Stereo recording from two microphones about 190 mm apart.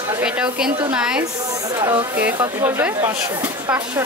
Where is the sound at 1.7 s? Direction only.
15° right (ahead or behind).